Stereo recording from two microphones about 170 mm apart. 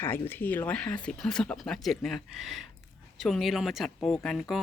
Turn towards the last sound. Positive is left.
turn(degrees=0)  # may be behind; listen again after turning